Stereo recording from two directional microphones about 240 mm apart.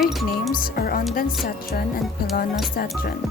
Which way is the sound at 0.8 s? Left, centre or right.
Left.